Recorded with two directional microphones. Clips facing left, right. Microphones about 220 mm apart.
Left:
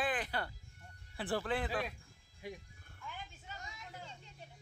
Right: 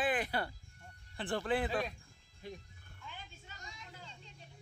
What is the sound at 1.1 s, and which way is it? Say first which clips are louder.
Speech: right 2 dB; 5° left (ahead or behind).